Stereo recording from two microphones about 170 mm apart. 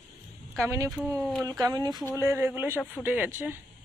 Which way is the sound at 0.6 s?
15° right (ahead or behind).